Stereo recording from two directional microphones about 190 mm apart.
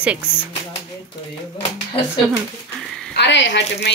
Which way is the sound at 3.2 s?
70° left (ahead or behind).